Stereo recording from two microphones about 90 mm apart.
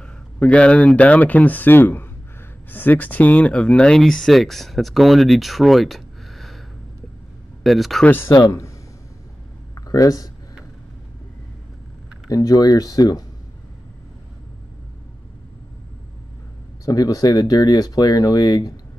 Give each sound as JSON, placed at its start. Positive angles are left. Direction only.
{"t": 0.0, "sound": "speech", "side_deg": 15}
{"t": 7.6, "sound": "speech", "side_deg": 0}
{"t": 8.0, "sound": "speech", "side_deg": 25}
{"t": 8.4, "sound": "speech", "side_deg": 35}
{"t": 9.8, "sound": "speech", "side_deg": 40}
{"t": 12.3, "sound": "speech", "side_deg": 40}
{"t": 16.8, "sound": "speech", "side_deg": 40}